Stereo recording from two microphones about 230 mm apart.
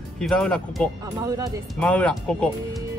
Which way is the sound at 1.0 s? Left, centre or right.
Centre.